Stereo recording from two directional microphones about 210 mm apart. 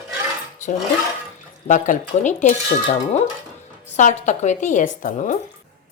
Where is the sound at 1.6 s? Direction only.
35° left (ahead or behind).